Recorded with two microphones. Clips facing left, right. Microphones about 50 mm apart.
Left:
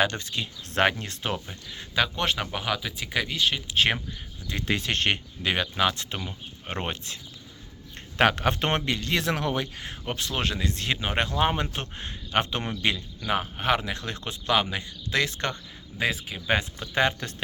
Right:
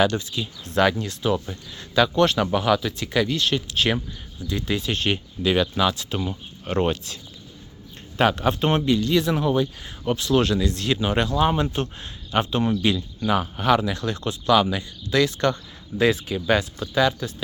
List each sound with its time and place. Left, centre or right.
0.0 s speech: left
2.0 s speech: centre
2.5 s speech: centre
3.8 s speech: left
6.7 s speech: left
8.2 s speech: left
10.2 s speech: left
13.2 s speech: centre
16.0 s speech: centre
16.5 s speech: left
16.9 s speech: left